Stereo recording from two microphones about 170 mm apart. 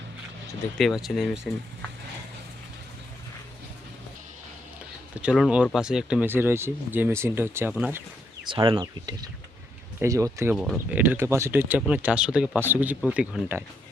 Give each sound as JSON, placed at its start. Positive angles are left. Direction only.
{"t": 0.8, "sound": "speech", "side_deg": 0}
{"t": 5.1, "sound": "speech", "side_deg": -5}
{"t": 8.4, "sound": "speech", "side_deg": -30}
{"t": 10.5, "sound": "speech", "side_deg": -5}